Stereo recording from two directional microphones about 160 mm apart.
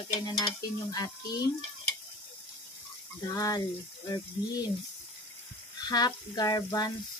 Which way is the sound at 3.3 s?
20° left (ahead or behind).